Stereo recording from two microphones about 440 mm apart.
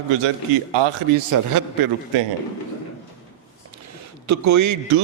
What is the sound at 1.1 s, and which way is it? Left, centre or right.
Speech, right.